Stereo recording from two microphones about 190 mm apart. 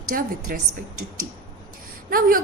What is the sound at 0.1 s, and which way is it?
Speech, 50° right (ahead or behind).